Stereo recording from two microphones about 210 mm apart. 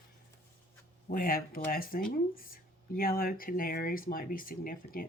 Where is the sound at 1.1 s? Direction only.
45° left (ahead or behind).